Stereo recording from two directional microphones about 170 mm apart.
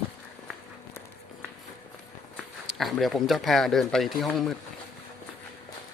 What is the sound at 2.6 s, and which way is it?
Speech, centre (ahead or behind).